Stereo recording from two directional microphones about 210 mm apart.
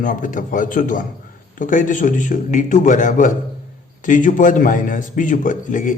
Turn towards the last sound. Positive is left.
turn(degrees=40)  # may be behind; listen again after turning